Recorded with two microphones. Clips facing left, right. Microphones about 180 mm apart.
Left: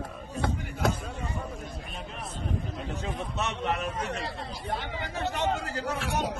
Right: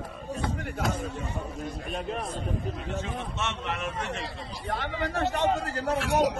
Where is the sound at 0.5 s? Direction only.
65° right (ahead or behind).